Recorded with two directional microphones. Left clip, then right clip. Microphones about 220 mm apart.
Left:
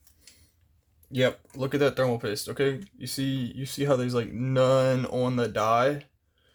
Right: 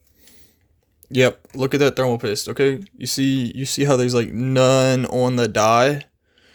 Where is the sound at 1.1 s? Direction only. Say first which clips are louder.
Right 8 dB; 40° right (ahead or behind).